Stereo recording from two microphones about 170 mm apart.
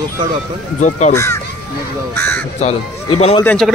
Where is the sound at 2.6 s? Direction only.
40° left (ahead or behind).